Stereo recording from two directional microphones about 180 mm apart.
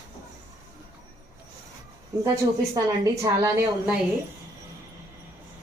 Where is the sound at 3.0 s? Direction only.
15° right (ahead or behind).